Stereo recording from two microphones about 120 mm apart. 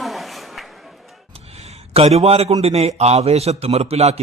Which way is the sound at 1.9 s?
60° right (ahead or behind).